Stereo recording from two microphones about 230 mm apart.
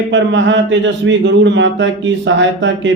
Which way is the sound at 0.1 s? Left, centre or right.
Right.